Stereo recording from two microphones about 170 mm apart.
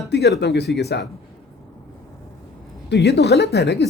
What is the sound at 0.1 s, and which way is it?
Speech, 80° left.